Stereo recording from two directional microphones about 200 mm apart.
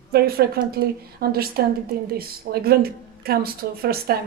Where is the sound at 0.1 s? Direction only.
50° right (ahead or behind).